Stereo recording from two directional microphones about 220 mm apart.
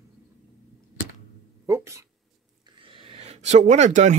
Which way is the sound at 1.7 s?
15° right (ahead or behind).